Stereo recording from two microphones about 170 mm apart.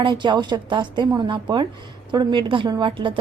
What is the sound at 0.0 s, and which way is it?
A woman's voice, 30° right (ahead or behind).